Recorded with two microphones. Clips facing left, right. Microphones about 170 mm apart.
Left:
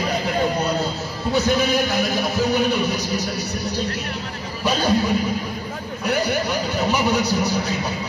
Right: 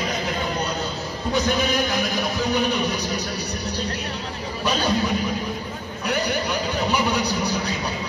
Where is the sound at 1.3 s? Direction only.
15° right (ahead or behind).